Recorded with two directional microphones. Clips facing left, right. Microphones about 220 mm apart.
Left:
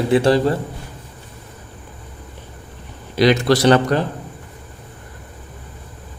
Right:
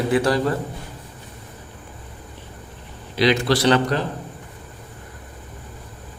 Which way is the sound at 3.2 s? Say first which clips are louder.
Left 4 dB; 45° left (ahead or behind).